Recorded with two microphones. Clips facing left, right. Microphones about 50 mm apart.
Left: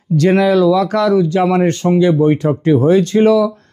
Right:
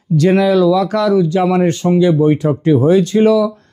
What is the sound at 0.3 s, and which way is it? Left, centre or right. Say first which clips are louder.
Speech: even; left.